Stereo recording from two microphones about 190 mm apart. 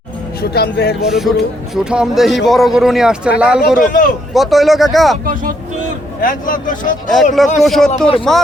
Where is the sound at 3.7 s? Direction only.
45° left (ahead or behind).